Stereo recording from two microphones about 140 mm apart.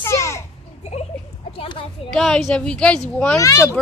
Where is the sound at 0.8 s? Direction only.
50° left (ahead or behind).